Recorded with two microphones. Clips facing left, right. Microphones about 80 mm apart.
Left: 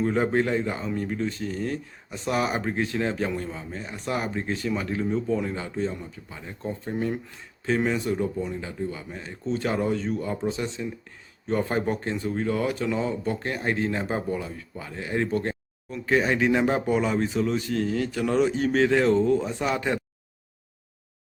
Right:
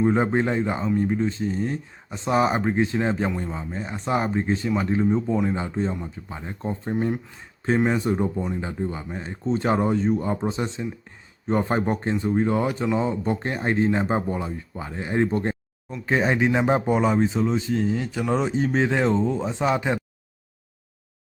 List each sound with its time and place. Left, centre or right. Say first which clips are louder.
0.0 s speech: right 2 dB; right